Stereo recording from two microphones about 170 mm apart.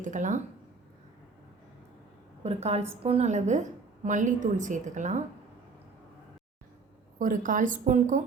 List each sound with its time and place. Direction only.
0.0 s a woman's voice: 45° right (ahead or behind)
2.4 s a woman's voice: 40° right (ahead or behind)
7.2 s a woman's voice: 50° right (ahead or behind)